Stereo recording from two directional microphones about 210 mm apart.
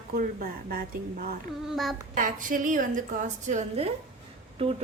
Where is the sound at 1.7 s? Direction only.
Centre (ahead or behind).